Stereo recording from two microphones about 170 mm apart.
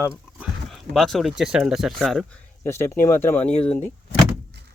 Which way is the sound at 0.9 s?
Centre (ahead or behind).